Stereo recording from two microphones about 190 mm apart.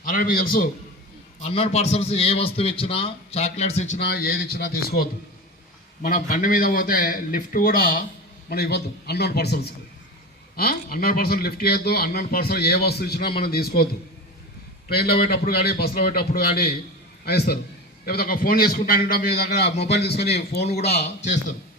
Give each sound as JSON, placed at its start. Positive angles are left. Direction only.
{"t": 0.0, "sound": "a man's voice", "side_deg": 50}
{"t": 1.4, "sound": "a man's voice", "side_deg": 30}
{"t": 3.9, "sound": "a man's voice", "side_deg": 55}
{"t": 10.6, "sound": "a man's voice", "side_deg": 50}
{"t": 14.9, "sound": "a man's voice", "side_deg": 55}